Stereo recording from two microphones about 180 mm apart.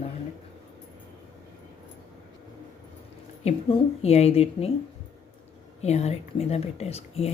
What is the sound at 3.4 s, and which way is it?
Speech, 35° left (ahead or behind).